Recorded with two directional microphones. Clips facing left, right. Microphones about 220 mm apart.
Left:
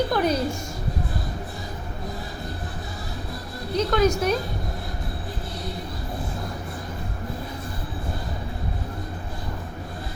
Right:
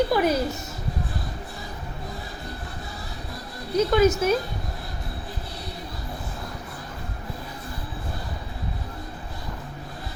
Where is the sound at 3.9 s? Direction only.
5° right (ahead or behind).